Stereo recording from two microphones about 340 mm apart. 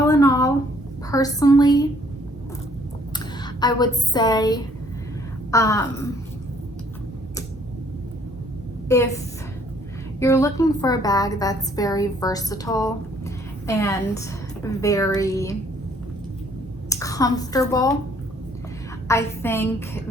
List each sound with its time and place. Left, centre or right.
0.1 s a sound: centre
1.1 s a woman's voice: centre
3.1 s a woman's voice: centre
8.9 s a woman's voice: centre
16.9 s a woman's voice: centre
19.0 s a woman's voice: centre